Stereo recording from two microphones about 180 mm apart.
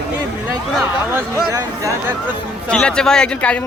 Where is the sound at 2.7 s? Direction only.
5° left (ahead or behind).